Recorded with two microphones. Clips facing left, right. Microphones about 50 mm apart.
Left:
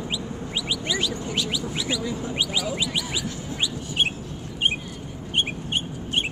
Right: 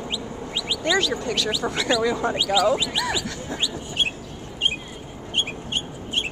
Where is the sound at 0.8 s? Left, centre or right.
Right.